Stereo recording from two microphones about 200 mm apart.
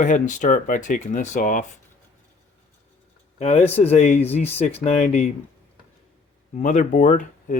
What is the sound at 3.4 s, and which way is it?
Speech, 30° left (ahead or behind).